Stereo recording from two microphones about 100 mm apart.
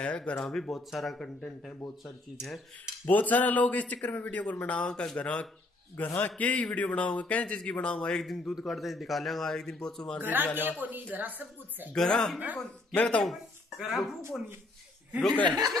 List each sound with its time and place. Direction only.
0.0 s speech: 10° left (ahead or behind)
2.3 s speech: 5° right (ahead or behind)
3.1 s a man's voice: 15° left (ahead or behind)
10.2 s a man's voice: 20° right (ahead or behind)
11.9 s a man's voice: 5° left (ahead or behind)
13.3 s speech: centre (ahead or behind)
15.4 s speech: 40° right (ahead or behind)